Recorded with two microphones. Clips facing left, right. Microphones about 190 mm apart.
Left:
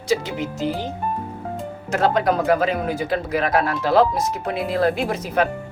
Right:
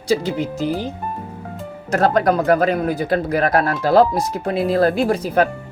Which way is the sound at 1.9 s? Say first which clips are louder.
Right 3 dB; 40° right (ahead or behind).